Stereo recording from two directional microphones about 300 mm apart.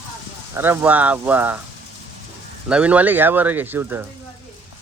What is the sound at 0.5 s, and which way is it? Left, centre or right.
Speech, centre.